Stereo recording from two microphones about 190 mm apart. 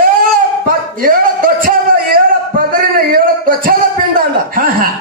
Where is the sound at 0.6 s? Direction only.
50° right (ahead or behind).